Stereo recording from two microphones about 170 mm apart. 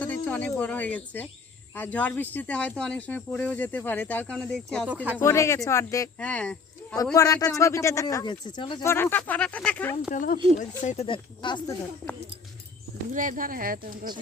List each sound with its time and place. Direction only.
0.0 s cricket: 10° left (ahead or behind)
1.7 s speech: 10° left (ahead or behind)
5.1 s speech: 15° left (ahead or behind)
6.1 s speech: 5° left (ahead or behind)
6.9 s speech: 20° left (ahead or behind)
8.8 s speech: 15° left (ahead or behind)
10.1 s speech: 50° left (ahead or behind)
11.0 s speech: 30° left (ahead or behind)
13.1 s speech: 50° right (ahead or behind)